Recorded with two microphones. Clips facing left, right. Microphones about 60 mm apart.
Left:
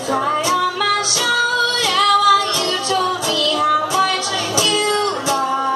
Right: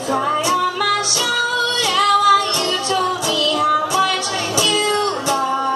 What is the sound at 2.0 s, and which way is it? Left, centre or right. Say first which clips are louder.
Music: even; right.